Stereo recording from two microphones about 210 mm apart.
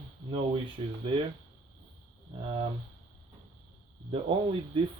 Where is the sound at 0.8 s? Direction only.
25° right (ahead or behind).